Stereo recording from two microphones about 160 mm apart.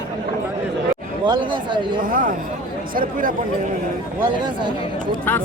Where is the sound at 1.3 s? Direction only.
30° right (ahead or behind).